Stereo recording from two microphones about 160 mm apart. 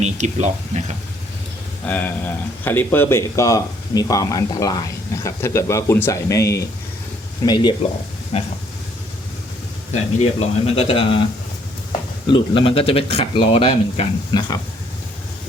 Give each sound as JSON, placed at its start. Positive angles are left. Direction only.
{"t": 0.0, "sound": "speech", "side_deg": -45}
{"t": 1.9, "sound": "speech", "side_deg": 10}
{"t": 8.3, "sound": "speech", "side_deg": 40}
{"t": 9.9, "sound": "speech", "side_deg": 45}
{"t": 12.3, "sound": "speech", "side_deg": 35}
{"t": 14.3, "sound": "speech", "side_deg": 25}